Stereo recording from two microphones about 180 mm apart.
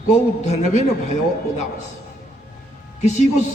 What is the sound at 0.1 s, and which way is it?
A man's voice, 40° left (ahead or behind).